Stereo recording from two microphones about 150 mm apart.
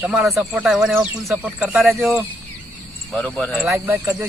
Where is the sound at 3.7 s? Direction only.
15° right (ahead or behind).